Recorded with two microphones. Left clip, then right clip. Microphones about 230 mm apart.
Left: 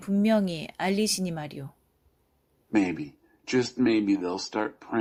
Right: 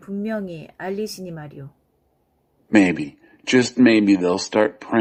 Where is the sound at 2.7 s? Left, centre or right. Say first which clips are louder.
Right 10 dB; right.